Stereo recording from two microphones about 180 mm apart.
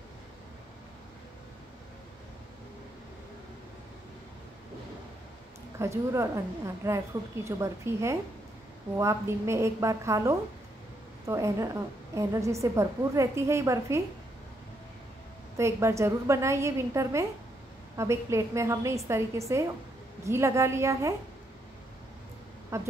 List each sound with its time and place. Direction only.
5.8 s a woman's voice: 15° right (ahead or behind)
15.5 s a woman's voice: 15° right (ahead or behind)
22.7 s a woman's voice: 15° right (ahead or behind)